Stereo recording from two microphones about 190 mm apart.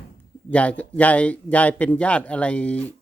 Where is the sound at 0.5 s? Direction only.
5° left (ahead or behind).